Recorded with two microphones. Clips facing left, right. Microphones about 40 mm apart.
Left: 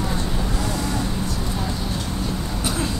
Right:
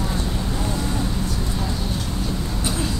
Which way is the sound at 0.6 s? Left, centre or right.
Left.